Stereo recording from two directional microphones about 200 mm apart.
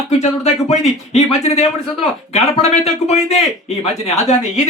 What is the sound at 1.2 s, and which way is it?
Speech, 30° left (ahead or behind).